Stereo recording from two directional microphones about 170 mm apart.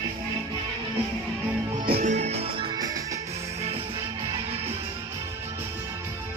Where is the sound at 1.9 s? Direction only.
45° right (ahead or behind); by 2.9 s 30° right (ahead or behind).